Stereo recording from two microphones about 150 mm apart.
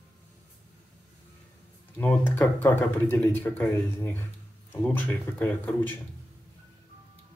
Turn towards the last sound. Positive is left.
turn(degrees=10)  # may be behind; listen again after turning